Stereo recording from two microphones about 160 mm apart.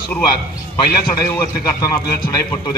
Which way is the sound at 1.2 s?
20° left (ahead or behind).